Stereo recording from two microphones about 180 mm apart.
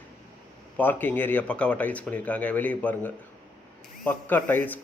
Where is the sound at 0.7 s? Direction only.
10° left (ahead or behind).